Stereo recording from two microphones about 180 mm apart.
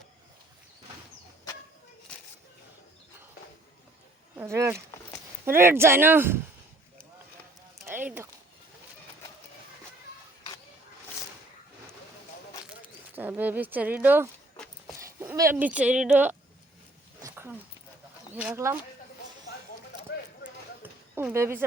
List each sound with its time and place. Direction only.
4.4 s speech: 15° right (ahead or behind)
7.9 s a sound: 10° right (ahead or behind)
13.1 s speech: 10° right (ahead or behind)
17.2 s dog: 10° right (ahead or behind)
18.3 s speech: 10° right (ahead or behind)
20.8 s a sound: 10° right (ahead or behind)